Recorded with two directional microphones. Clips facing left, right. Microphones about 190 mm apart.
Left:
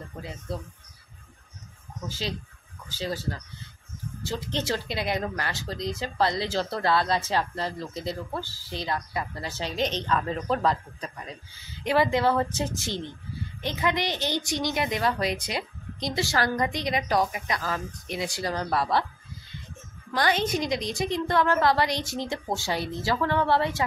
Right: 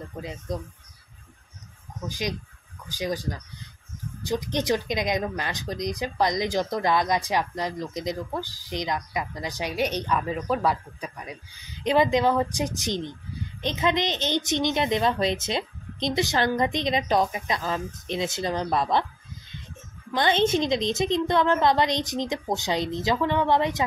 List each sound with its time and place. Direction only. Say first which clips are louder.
0.2 s speech: right 3 dB; 20° right (ahead or behind)
2.0 s speech: right 3 dB; 15° right (ahead or behind)
20.1 s a woman's voice: right 3 dB; 25° right (ahead or behind)